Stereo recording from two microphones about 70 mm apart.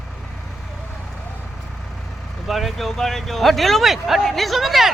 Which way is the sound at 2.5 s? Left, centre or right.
Centre.